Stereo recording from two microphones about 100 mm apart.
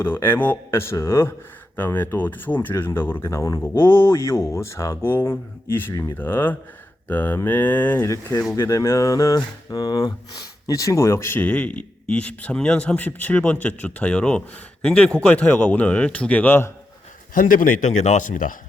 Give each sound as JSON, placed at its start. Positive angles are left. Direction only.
{"t": 0.0, "sound": "speech", "side_deg": 20}
{"t": 8.0, "sound": "speech", "side_deg": 30}
{"t": 10.7, "sound": "speech", "side_deg": 35}